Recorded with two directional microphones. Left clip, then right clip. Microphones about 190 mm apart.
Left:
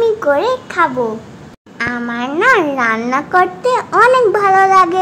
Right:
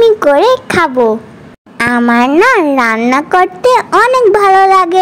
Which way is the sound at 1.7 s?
40° right (ahead or behind).